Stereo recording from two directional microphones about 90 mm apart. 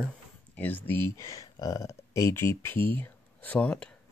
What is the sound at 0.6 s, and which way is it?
Speech, 20° left (ahead or behind).